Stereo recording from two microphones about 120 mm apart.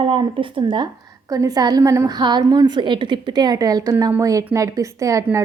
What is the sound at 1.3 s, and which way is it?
Speech, 30° right (ahead or behind).